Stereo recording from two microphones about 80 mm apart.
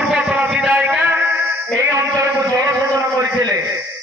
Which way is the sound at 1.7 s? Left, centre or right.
Right.